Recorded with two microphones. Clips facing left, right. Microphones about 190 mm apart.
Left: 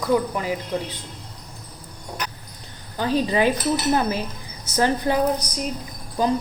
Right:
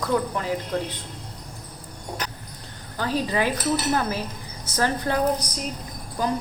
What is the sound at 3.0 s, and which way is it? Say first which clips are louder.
A woman's voice: left 4 dB; 20° left (ahead or behind).